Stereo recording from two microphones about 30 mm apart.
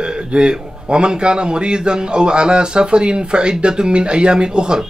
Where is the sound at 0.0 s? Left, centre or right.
Right.